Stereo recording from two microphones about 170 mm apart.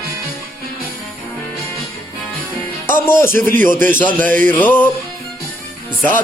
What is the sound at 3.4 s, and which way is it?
Speech, 55° right (ahead or behind).